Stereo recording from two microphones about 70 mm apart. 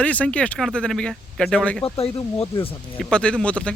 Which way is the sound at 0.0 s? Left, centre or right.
Centre.